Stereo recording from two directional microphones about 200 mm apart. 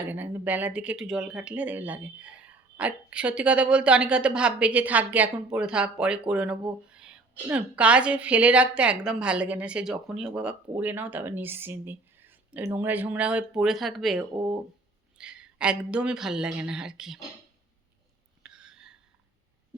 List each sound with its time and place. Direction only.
0.1 s a woman's voice: 10° right (ahead or behind)
14.3 s speech: 25° right (ahead or behind)
15.2 s speech: 5° right (ahead or behind)
18.4 s a sound: 5° right (ahead or behind)